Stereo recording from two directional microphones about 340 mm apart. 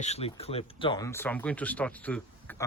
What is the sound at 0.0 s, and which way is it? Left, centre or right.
Speech, centre.